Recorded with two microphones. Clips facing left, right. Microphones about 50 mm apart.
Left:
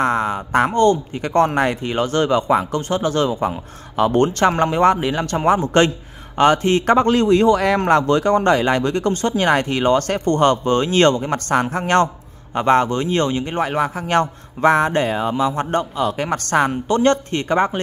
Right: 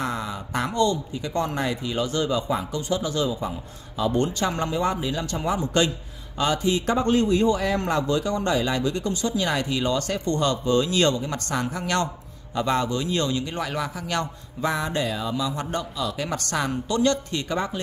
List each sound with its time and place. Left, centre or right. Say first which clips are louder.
0.0 s speech: left 10 dB; left
7.1 s a man's voice: left 6 dB; left